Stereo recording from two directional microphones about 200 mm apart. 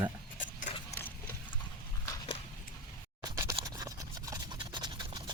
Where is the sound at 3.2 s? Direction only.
20° right (ahead or behind).